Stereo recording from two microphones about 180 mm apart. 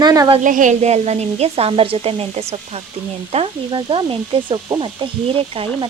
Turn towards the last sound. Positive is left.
turn(degrees=-30)  # may be behind; listen again after turning